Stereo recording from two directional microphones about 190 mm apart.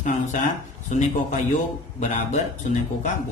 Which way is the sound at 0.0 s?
40° left (ahead or behind).